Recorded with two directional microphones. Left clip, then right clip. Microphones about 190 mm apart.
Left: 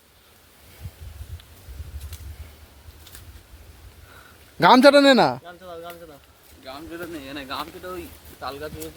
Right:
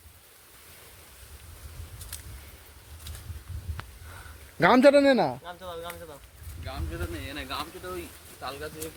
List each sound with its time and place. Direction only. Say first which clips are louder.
4.6 s a man's voice: left 5 dB; 15° left (ahead or behind)
5.5 s a man's voice: even; centre (ahead or behind)
6.7 s speech: left 3 dB; 60° left (ahead or behind)